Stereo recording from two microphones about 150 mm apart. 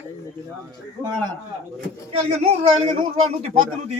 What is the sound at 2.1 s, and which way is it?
A man's voice, 40° right (ahead or behind).